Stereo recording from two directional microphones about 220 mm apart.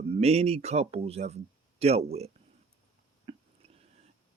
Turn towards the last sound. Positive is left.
turn(degrees=-25)  # may be behind; listen again after turning